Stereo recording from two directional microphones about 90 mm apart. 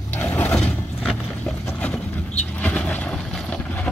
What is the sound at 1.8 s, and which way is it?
Vehicle, 15° left (ahead or behind).